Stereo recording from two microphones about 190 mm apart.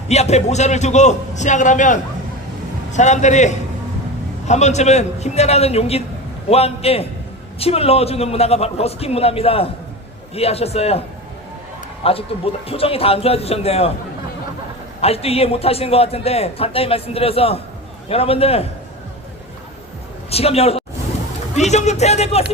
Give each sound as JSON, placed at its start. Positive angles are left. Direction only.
{"t": 0.1, "sound": "a man's voice", "side_deg": 35}
{"t": 12.0, "sound": "a man's voice", "side_deg": 30}
{"t": 15.0, "sound": "a man's voice", "side_deg": 30}
{"t": 20.3, "sound": "a man's voice", "side_deg": 30}